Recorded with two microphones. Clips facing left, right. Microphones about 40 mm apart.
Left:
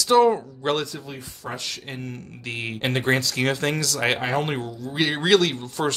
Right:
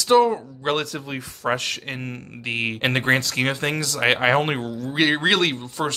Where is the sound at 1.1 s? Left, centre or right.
Right.